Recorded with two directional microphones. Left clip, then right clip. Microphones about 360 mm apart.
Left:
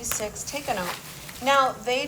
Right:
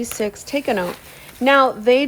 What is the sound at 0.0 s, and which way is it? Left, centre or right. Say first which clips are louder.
A woman's voice: right 7 dB; right.